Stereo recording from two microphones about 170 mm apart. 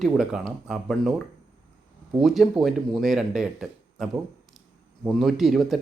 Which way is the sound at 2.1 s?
Centre (ahead or behind).